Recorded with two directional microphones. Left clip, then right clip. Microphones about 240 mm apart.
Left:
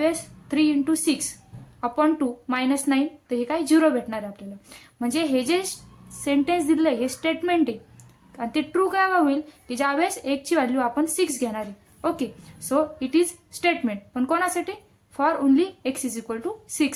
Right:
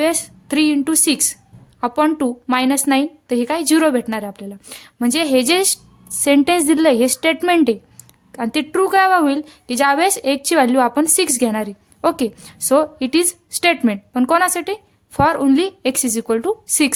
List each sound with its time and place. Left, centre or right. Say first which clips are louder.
0.0 s a woman's voice: right 6 dB; right